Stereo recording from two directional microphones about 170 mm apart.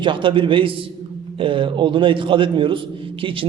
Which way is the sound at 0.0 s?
30° right (ahead or behind).